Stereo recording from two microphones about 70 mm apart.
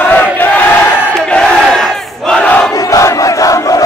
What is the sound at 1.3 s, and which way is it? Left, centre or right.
Crowd, centre.